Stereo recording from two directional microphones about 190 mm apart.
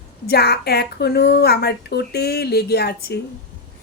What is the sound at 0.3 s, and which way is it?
A woman's voice, 55° left (ahead or behind).